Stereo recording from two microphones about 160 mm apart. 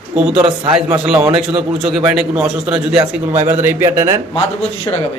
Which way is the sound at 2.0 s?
5° right (ahead or behind).